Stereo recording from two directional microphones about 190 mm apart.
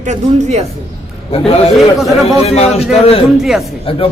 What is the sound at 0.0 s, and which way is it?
Speech, 35° right (ahead or behind).